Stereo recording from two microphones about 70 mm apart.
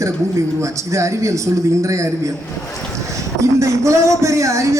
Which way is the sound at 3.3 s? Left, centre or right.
Right.